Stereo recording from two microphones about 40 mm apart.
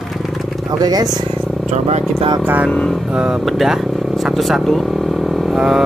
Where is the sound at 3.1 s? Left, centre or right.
Right.